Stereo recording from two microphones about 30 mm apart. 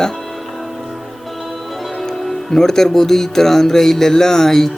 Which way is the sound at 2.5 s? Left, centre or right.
Centre.